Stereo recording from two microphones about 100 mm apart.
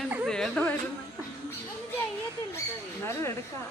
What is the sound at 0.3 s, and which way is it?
Speech, 5° left (ahead or behind).